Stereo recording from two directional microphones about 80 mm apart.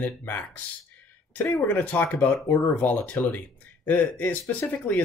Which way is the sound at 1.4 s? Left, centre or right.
Left.